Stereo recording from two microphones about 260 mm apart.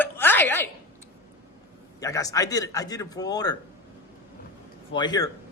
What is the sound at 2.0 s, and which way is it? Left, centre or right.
A man's voice, centre.